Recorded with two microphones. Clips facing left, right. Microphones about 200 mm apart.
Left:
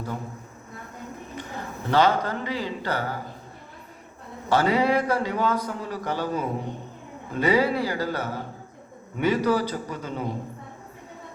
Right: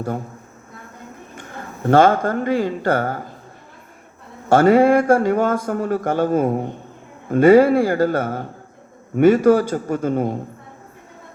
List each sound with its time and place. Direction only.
1.4 s speech: 50° right (ahead or behind)
4.4 s speech: 50° right (ahead or behind)